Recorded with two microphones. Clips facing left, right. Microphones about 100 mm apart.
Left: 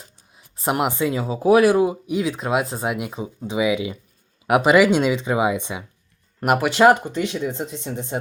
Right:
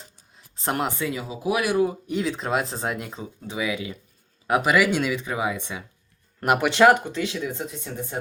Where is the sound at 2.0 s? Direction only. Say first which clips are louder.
Left 3 dB; 5° left (ahead or behind).